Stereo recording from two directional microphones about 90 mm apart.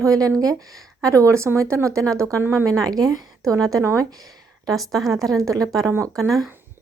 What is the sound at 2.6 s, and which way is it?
Speech, 40° right (ahead or behind).